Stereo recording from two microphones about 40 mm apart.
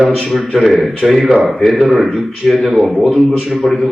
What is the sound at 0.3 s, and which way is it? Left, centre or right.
A man's voice, centre.